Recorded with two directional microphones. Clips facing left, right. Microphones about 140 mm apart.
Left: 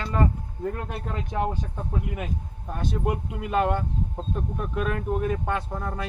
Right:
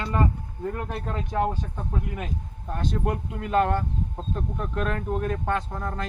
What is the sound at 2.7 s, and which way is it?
Speech, 10° left (ahead or behind).